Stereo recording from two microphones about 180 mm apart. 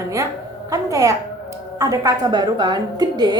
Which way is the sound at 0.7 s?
20° right (ahead or behind).